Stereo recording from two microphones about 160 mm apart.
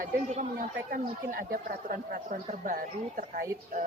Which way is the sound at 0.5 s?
65° right (ahead or behind).